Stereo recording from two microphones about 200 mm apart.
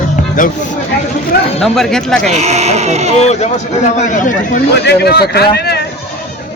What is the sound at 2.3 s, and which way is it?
Speech, 35° right (ahead or behind).